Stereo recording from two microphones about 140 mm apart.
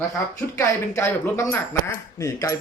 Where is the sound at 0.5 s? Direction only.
20° left (ahead or behind).